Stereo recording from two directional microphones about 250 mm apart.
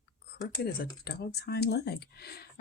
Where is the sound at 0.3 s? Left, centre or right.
Left.